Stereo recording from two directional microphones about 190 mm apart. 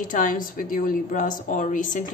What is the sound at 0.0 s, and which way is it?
A woman's voice, 45° left (ahead or behind).